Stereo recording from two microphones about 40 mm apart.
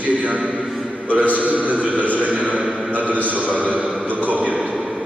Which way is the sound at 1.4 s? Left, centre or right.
Right.